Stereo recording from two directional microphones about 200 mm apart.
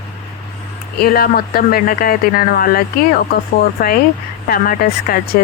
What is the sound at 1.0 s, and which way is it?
Speech, 50° left (ahead or behind).